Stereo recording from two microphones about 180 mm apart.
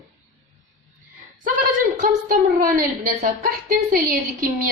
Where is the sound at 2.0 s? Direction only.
50° right (ahead or behind).